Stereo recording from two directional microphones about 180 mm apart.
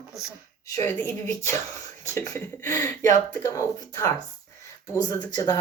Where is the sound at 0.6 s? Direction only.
15° left (ahead or behind).